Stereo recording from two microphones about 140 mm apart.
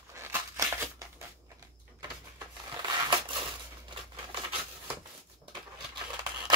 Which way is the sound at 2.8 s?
30° right (ahead or behind).